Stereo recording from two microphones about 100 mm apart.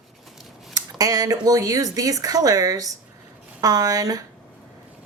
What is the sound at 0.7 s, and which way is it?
Speech, 40° right (ahead or behind).